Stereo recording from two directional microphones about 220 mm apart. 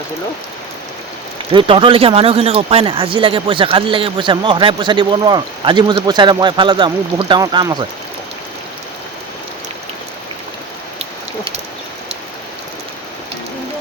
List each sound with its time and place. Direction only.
1.5 s speech: 25° right (ahead or behind)